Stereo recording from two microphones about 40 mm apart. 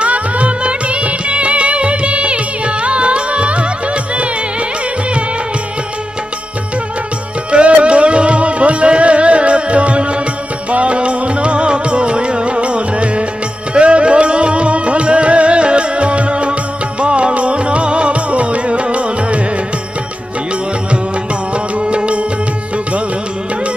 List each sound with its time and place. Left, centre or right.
0.0 s music: right
7.5 s music: right
21.7 s music: right